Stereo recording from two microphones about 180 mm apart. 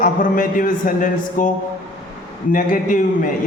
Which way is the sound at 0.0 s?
50° left (ahead or behind).